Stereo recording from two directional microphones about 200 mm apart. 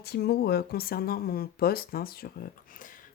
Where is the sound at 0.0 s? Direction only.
55° left (ahead or behind).